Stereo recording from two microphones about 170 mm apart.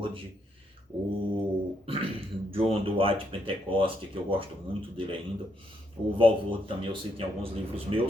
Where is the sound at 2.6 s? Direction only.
30° right (ahead or behind).